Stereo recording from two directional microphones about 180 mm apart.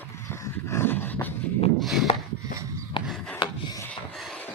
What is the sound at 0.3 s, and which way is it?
Dog, 15° left (ahead or behind).